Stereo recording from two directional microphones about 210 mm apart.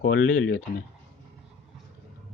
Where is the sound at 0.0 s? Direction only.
60° left (ahead or behind).